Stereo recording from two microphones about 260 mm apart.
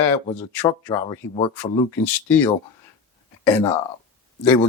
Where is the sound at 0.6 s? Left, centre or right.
Centre.